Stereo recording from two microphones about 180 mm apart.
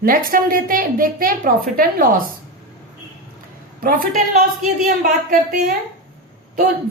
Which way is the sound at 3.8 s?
50° right (ahead or behind).